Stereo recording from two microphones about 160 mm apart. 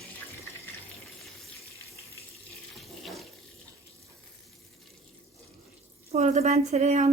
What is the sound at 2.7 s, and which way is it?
Water, centre (ahead or behind).